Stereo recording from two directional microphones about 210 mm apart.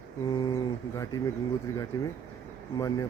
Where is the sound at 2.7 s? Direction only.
15° left (ahead or behind).